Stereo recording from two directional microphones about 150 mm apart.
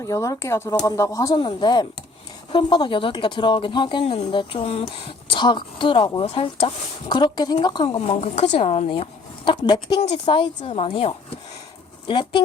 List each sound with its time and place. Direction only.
0.0 s a woman's voice: 20° left (ahead or behind)
4.0 s speech: 45° left (ahead or behind)
4.3 s a woman's voice: 35° left (ahead or behind)
7.1 s a woman's voice: 30° left (ahead or behind)
10.0 s a woman's voice: 40° left (ahead or behind)